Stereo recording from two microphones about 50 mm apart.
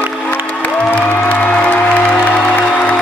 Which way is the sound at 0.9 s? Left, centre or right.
Left.